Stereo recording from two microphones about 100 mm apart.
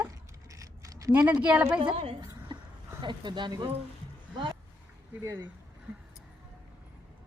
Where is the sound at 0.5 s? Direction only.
35° right (ahead or behind).